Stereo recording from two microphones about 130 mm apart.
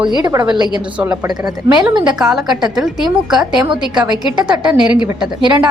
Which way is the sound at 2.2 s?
5° right (ahead or behind).